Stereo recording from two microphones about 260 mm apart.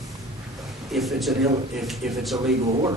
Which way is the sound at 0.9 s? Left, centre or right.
Centre.